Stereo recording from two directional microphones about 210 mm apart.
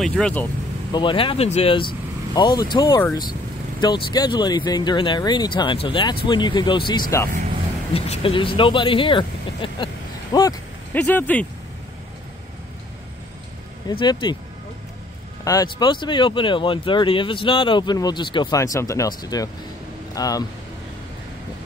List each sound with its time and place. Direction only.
0.0 s speech: 5° left (ahead or behind)
0.9 s speech: 25° left (ahead or behind)
10.3 s a sound: 15° left (ahead or behind)
11.0 s speech: 5° left (ahead or behind)
13.8 s speech: 20° left (ahead or behind)
15.4 s speech: 20° left (ahead or behind)